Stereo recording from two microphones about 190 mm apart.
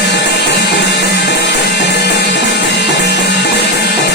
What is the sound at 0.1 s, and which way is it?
Music, 65° left (ahead or behind).